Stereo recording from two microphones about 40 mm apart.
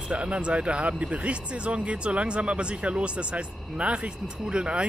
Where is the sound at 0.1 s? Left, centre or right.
Right.